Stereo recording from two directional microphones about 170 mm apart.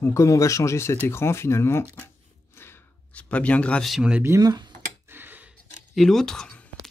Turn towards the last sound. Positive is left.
turn(degrees=5)  # may be behind; listen again after turning